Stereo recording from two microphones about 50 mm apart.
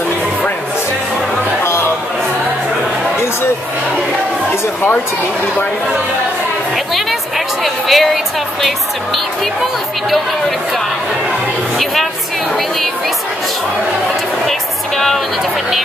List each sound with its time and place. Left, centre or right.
1.6 s chatter: left
6.9 s music: centre
11.8 s a woman's voice: centre